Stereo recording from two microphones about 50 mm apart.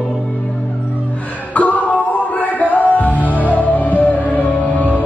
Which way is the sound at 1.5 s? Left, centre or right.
Left.